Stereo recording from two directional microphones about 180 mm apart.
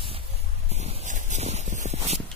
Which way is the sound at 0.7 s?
35° right (ahead or behind).